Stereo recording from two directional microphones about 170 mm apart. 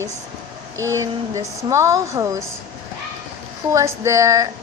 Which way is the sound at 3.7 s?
20° right (ahead or behind).